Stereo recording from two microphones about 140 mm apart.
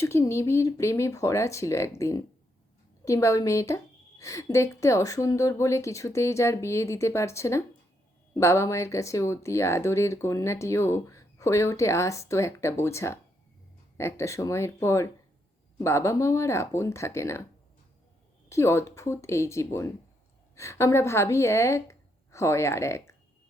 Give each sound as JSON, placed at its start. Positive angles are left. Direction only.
{"t": 0.0, "sound": "speech", "side_deg": 20}
{"t": 18.4, "sound": "a woman's voice", "side_deg": 20}